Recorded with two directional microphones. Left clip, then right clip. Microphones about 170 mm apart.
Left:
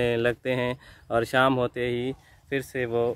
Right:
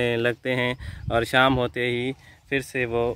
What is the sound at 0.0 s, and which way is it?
Speech, 25° right (ahead or behind).